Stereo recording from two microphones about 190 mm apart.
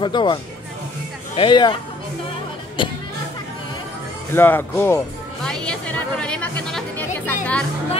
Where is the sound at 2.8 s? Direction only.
25° left (ahead or behind).